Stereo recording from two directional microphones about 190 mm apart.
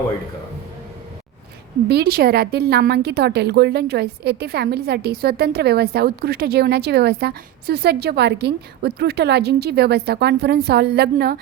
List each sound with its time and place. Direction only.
1.9 s a woman's voice: 55° right (ahead or behind)